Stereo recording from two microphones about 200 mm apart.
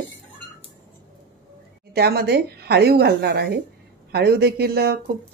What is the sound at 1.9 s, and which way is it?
Speech, 50° right (ahead or behind).